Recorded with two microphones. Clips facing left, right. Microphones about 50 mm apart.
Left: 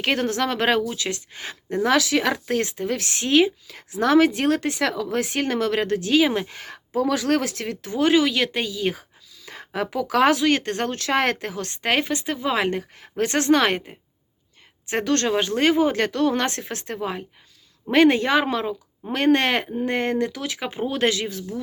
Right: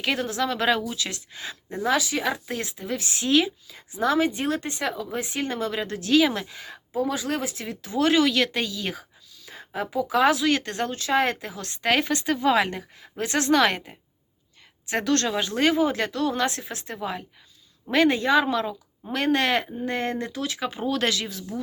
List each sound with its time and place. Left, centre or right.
0.0 s speech: left
3.2 s a woman's voice: left
3.7 s a woman's voice: left
6.0 s a woman's voice: left
6.5 s a woman's voice: left
6.9 s speech: left
7.9 s speech: left
9.5 s speech: left; by 12.6 s centre
12.9 s a woman's voice: left
17.0 s speech: left
17.9 s a woman's voice: left